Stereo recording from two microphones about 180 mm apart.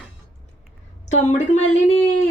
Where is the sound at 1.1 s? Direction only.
40° left (ahead or behind).